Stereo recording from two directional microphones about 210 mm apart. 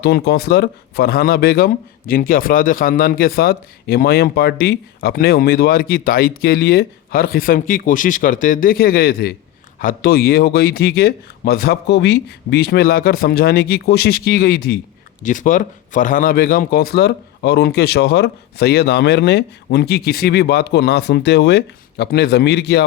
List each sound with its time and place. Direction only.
0.0 s a man's voice: 50° left (ahead or behind)